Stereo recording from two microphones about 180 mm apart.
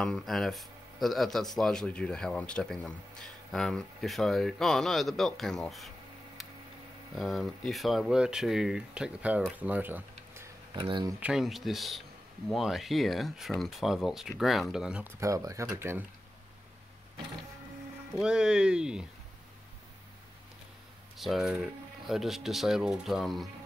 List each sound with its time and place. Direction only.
0.0 s speech: centre (ahead or behind)
7.2 s speech: centre (ahead or behind)
9.6 s tick-tock: 10° right (ahead or behind)
10.7 s speech: 25° right (ahead or behind)
11.1 s speech: 5° right (ahead or behind)
15.1 s speech: 15° right (ahead or behind)
18.2 s speech: 5° right (ahead or behind)
21.2 s speech: centre (ahead or behind)